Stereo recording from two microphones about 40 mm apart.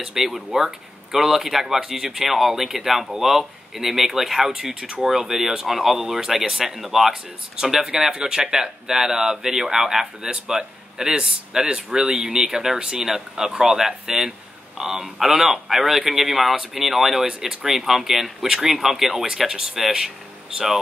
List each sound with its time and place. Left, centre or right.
0.0 s speech: centre
5.0 s speech: centre